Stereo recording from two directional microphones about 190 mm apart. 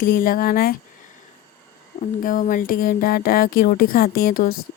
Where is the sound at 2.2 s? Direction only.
45° left (ahead or behind).